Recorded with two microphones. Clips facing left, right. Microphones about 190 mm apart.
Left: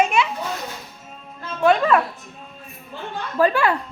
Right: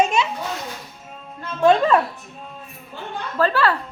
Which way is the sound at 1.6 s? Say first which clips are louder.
Right 1 dB; 25° right (ahead or behind).